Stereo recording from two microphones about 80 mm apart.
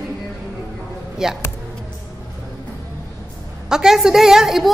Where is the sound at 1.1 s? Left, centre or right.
Centre.